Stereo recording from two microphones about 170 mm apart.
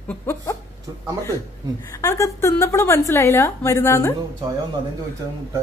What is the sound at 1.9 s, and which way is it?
A woman's voice, 20° left (ahead or behind).